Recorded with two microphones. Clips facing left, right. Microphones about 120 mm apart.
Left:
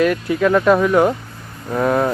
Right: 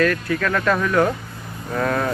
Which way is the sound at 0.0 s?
15° left (ahead or behind).